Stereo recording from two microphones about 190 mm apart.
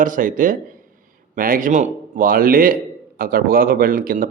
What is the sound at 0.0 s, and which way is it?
Speech, 45° right (ahead or behind).